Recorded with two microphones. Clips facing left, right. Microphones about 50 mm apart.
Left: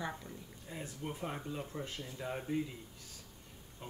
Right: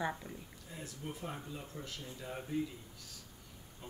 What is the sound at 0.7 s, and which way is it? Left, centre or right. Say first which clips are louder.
Speech: left 3 dB; left.